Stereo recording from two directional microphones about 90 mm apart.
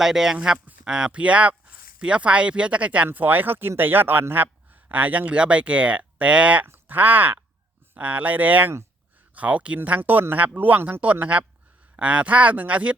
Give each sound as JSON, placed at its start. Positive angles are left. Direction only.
{"t": 0.0, "sound": "speech", "side_deg": -5}